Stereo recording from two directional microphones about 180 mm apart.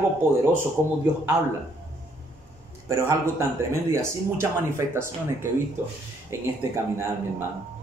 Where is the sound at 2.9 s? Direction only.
15° right (ahead or behind).